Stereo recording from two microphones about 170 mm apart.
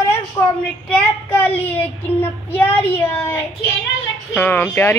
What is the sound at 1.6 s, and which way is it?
Speech, 10° left (ahead or behind).